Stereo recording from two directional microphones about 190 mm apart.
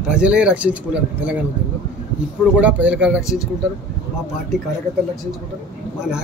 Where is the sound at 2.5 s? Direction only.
5° right (ahead or behind).